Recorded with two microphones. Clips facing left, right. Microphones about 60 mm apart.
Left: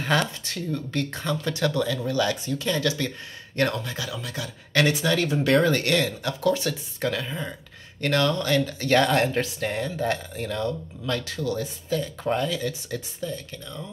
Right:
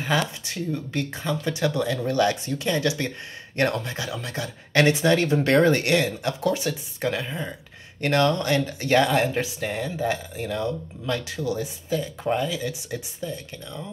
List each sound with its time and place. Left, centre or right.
0.0 s speech: centre
2.0 s speech: right
8.9 s speech: centre